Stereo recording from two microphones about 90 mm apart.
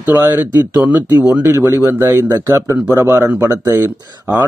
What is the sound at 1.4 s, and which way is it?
A man's voice, 30° right (ahead or behind).